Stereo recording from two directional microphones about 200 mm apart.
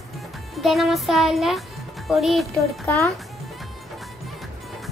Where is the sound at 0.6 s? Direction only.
Centre (ahead or behind).